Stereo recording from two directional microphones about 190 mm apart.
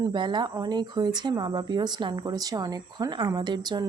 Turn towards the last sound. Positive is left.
turn(degrees=-20)  # may be behind; listen again after turning